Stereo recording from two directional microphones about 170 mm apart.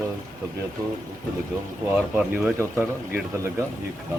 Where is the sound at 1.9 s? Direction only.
5° right (ahead or behind).